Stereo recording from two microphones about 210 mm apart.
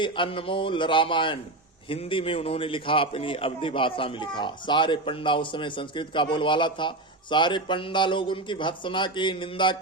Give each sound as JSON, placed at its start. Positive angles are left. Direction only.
{"t": 0.0, "sound": "a man's voice", "side_deg": 25}